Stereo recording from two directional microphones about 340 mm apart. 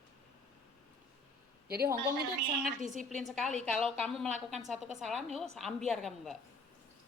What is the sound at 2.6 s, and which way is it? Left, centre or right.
Speech, right.